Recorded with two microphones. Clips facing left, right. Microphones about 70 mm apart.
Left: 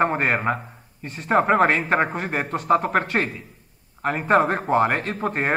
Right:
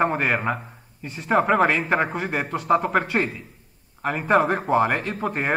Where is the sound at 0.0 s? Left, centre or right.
Centre.